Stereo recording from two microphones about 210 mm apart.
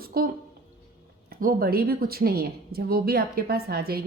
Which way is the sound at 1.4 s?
45° right (ahead or behind).